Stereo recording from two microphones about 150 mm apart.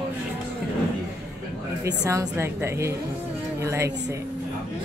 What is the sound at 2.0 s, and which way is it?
A woman's voice, 20° right (ahead or behind).